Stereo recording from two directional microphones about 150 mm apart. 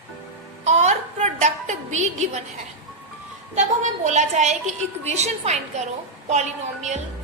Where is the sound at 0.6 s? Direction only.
50° right (ahead or behind).